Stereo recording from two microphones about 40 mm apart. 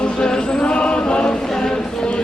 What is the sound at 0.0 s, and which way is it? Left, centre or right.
Chant, left.